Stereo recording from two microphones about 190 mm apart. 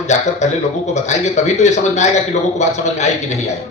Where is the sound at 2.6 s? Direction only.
35° left (ahead or behind).